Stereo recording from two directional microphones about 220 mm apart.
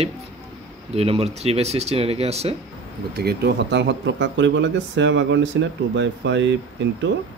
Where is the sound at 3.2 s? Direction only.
50° right (ahead or behind).